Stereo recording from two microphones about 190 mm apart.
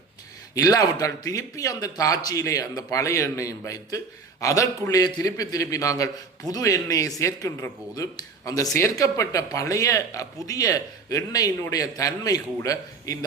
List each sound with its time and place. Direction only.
0.5 s speech: 20° left (ahead or behind)